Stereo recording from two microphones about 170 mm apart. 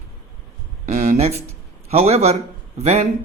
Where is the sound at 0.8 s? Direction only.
40° right (ahead or behind).